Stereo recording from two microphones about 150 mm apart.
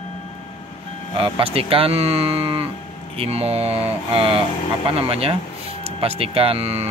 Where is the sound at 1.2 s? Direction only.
40° right (ahead or behind).